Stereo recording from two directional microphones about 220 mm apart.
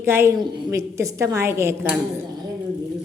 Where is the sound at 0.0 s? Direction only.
10° right (ahead or behind).